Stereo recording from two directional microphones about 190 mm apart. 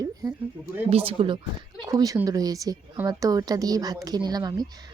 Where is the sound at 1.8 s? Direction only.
20° right (ahead or behind).